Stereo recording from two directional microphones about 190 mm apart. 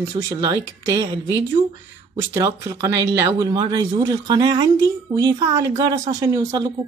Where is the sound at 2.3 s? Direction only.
15° right (ahead or behind).